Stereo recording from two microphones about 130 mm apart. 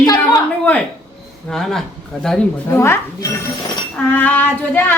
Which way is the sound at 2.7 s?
20° left (ahead or behind).